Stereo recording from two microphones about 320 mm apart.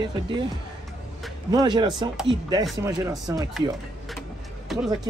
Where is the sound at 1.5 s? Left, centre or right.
Centre.